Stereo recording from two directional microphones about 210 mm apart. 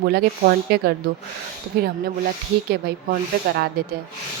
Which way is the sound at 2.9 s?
50° right (ahead or behind).